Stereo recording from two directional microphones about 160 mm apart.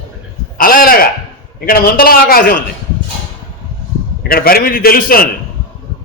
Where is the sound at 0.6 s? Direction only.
65° left (ahead or behind).